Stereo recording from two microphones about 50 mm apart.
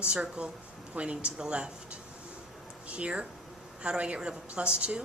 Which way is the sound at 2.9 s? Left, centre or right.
Right.